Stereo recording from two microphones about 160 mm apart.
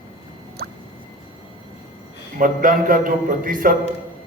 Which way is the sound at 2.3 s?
60° right (ahead or behind).